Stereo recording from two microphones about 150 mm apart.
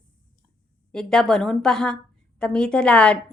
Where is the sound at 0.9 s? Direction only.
5° left (ahead or behind).